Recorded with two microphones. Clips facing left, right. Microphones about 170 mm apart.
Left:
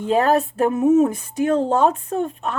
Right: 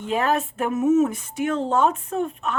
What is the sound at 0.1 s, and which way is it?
Speech, 35° left (ahead or behind).